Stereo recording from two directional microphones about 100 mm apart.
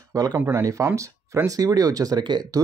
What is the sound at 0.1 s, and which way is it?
Speech, 40° right (ahead or behind).